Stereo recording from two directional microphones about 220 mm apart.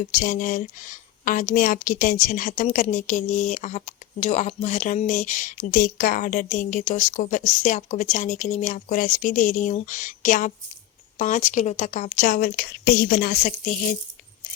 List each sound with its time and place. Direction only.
0.1 s a woman's voice: 35° left (ahead or behind)